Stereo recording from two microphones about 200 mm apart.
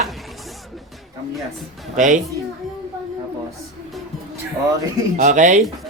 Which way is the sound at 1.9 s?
40° right (ahead or behind).